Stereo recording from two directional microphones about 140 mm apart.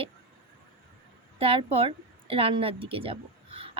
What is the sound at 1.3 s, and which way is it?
A woman's voice, 40° right (ahead or behind).